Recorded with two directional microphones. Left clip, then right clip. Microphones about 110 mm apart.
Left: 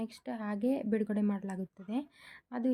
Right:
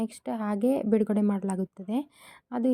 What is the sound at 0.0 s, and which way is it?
A woman's voice, 45° right (ahead or behind).